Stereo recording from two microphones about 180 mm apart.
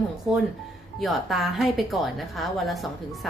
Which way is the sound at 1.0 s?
Centre (ahead or behind).